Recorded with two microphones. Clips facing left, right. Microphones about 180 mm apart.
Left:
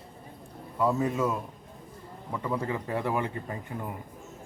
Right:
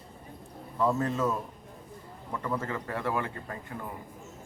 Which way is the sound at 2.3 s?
10° left (ahead or behind).